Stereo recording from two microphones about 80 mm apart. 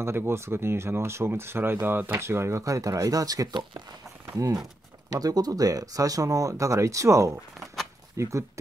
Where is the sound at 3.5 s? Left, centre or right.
Right.